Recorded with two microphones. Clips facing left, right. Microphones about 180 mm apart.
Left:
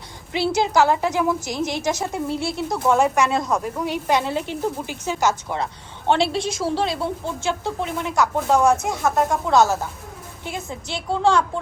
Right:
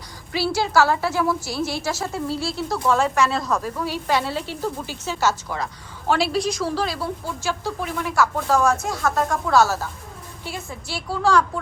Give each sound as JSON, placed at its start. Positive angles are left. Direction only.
{"t": 0.3, "sound": "speech", "side_deg": 20}